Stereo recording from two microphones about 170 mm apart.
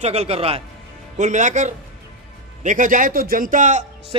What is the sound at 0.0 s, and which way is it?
A man's voice, 40° right (ahead or behind).